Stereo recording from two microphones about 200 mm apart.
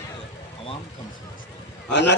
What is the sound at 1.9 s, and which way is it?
Speech, 60° left (ahead or behind).